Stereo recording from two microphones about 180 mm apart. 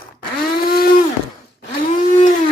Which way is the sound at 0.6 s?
55° left (ahead or behind).